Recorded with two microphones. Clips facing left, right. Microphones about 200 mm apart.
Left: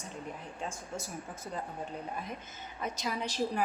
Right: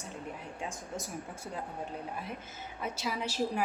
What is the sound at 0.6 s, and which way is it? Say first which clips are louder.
Speech: even; 15° right (ahead or behind).